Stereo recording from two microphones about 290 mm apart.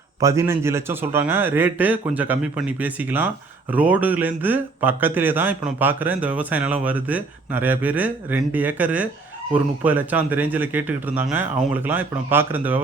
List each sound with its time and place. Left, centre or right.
0.2 s a man's voice: centre